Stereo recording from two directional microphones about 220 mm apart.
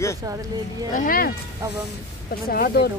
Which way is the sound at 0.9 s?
40° left (ahead or behind).